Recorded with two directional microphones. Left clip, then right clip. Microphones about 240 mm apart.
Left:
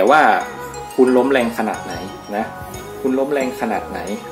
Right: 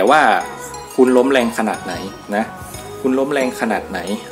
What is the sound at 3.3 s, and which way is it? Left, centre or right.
Speech, centre.